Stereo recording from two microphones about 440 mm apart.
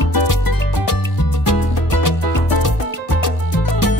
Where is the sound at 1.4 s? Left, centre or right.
Left.